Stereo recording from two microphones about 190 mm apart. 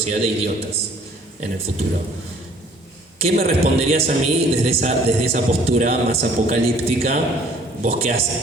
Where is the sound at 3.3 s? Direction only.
35° right (ahead or behind).